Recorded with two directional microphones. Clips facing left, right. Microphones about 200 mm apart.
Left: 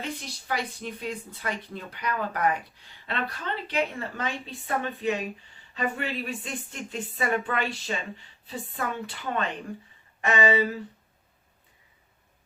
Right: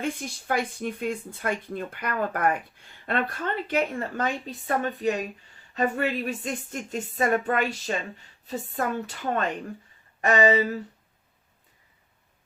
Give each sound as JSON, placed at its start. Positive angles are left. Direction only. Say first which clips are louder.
{"t": 0.0, "sound": "speech", "louder": "right 5 dB", "side_deg": -50}